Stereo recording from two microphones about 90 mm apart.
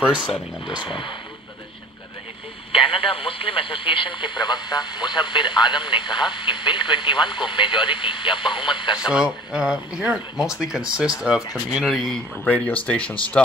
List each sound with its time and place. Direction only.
0.7 s speech: 60° left (ahead or behind)
2.7 s speech: 90° left; by 8.9 s 65° left (ahead or behind)
9.0 s speech: 10° right (ahead or behind)
11.8 s speech: centre (ahead or behind)
12.4 s speech: 15° left (ahead or behind)